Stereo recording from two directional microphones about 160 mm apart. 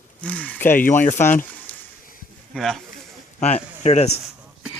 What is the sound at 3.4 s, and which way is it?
Speech, 45° left (ahead or behind).